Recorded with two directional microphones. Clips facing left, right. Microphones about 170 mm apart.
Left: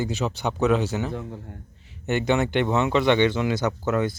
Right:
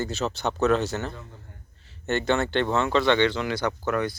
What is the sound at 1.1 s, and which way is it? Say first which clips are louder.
Speech: left 8 dB; 65° left (ahead or behind).